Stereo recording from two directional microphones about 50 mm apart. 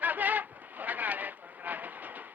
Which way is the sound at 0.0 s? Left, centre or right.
Right.